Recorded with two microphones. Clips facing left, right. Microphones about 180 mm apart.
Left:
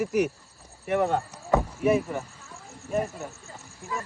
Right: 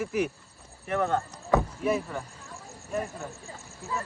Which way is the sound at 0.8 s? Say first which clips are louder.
Left 3 dB; 15° left (ahead or behind).